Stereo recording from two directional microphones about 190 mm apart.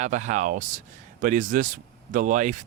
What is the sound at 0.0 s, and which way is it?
Speech, 40° right (ahead or behind).